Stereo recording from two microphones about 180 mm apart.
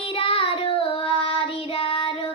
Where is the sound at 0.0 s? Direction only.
30° left (ahead or behind).